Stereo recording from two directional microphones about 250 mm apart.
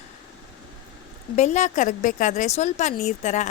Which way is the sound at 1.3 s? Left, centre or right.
Left.